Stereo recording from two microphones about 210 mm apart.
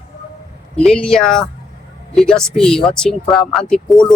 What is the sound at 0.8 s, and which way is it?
Speech, 5° left (ahead or behind).